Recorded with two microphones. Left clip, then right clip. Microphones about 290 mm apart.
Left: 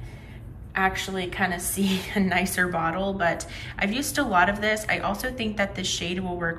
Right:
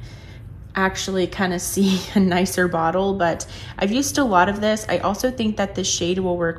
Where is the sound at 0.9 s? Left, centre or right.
Centre.